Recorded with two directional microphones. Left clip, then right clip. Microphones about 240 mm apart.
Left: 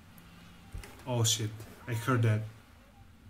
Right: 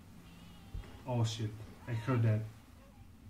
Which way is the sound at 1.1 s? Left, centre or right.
Left.